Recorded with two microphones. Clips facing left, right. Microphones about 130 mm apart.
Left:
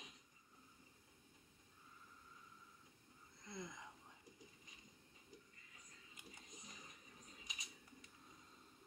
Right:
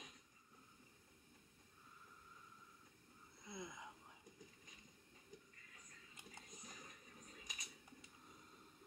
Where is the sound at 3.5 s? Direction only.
5° right (ahead or behind).